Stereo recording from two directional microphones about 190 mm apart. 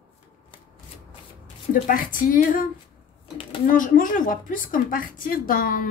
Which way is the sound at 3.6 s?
45° left (ahead or behind).